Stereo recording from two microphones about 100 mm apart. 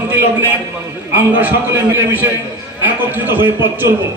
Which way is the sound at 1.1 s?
20° right (ahead or behind).